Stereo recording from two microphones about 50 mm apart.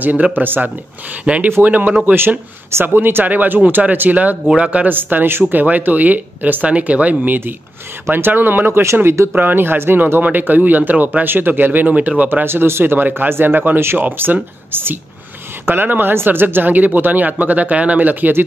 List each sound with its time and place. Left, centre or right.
0.0 s speech: right
1.2 s speech: right
1.6 s speech: right
2.1 s speech: right
4.8 s speech: right
8.1 s speech: right
10.2 s speech: right
12.3 s speech: right